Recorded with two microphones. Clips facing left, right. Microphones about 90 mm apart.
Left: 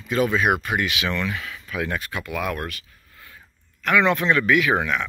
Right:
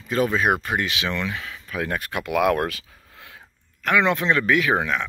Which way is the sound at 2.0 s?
60° right (ahead or behind).